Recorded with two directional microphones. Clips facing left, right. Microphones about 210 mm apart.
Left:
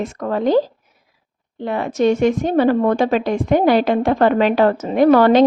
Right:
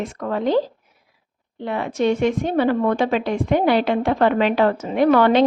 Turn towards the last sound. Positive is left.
turn(degrees=40)  # may be behind; listen again after turning